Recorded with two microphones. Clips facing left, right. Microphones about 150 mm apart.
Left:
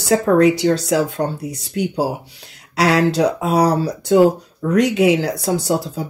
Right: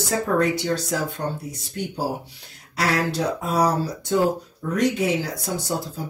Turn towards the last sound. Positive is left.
turn(degrees=75)  # may be behind; listen again after turning